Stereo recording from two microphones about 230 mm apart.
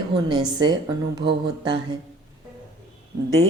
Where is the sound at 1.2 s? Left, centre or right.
Centre.